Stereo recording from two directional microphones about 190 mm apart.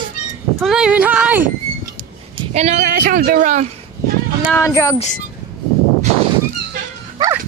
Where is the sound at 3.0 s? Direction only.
50° right (ahead or behind).